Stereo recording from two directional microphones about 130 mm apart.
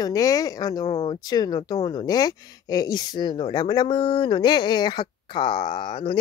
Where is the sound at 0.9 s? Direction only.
50° left (ahead or behind).